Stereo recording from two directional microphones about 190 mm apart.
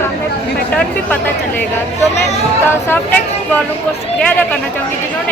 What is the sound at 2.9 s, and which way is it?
Speech, 10° left (ahead or behind).